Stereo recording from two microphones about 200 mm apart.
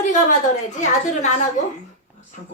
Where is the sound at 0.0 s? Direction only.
40° left (ahead or behind).